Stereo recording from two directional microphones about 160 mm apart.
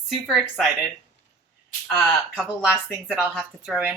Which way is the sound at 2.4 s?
5° right (ahead or behind).